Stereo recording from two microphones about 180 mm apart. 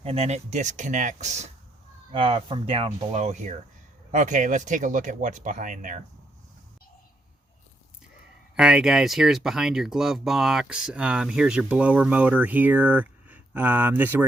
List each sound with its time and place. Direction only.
0.0 s speech: 35° right (ahead or behind)
8.5 s speech: 5° right (ahead or behind)